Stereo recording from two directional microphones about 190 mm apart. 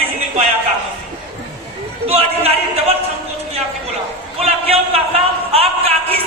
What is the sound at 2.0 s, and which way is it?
Speech, 30° right (ahead or behind).